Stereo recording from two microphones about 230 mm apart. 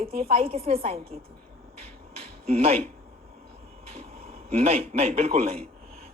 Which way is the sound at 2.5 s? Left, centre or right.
Right.